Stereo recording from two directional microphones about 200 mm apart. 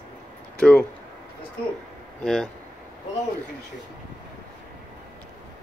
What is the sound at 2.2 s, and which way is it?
Speech, 5° left (ahead or behind).